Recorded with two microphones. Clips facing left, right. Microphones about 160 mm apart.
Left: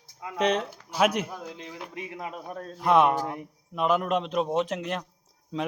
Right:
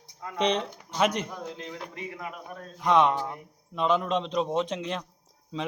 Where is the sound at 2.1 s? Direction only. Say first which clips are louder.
Left 2 dB; 25° left (ahead or behind).